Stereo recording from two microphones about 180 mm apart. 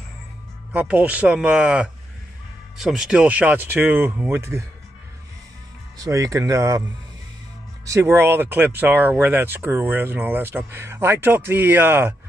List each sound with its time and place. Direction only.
0.7 s speech: 10° right (ahead or behind)
5.9 s speech: 20° right (ahead or behind)
7.8 s speech: 15° right (ahead or behind)